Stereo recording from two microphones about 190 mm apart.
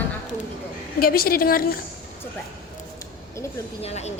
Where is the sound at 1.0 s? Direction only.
50° left (ahead or behind).